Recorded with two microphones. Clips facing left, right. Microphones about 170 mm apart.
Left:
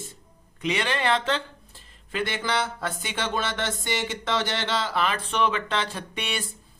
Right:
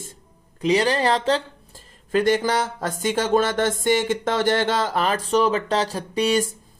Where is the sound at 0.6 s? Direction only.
35° right (ahead or behind).